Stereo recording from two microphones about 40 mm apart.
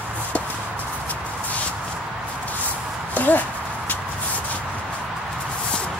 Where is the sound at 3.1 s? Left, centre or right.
Left.